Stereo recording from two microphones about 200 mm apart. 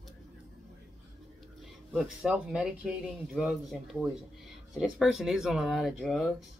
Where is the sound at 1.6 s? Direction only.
Centre (ahead or behind).